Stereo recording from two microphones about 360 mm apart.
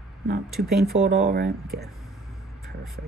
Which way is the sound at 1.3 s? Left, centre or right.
Right.